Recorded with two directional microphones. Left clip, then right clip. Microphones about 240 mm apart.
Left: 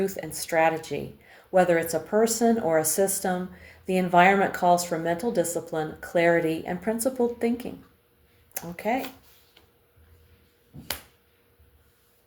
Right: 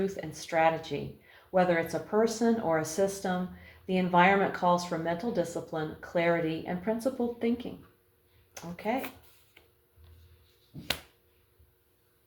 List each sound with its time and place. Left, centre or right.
0.3 s speech: left
8.5 s speech: left